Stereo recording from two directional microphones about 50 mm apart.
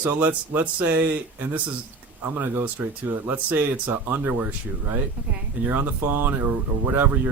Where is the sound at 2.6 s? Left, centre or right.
Right.